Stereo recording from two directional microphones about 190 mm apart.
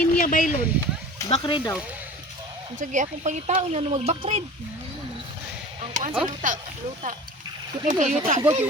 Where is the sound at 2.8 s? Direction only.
40° right (ahead or behind).